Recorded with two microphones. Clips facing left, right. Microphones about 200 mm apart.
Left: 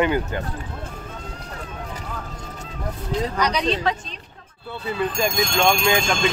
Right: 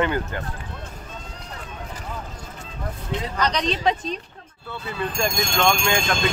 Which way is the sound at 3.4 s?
10° left (ahead or behind).